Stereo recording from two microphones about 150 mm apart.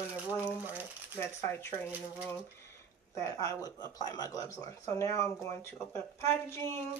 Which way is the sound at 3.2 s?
25° left (ahead or behind).